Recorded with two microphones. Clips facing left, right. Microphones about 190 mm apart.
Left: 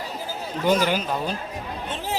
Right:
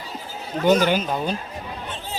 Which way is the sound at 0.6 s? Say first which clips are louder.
Right 4 dB; 50° right (ahead or behind).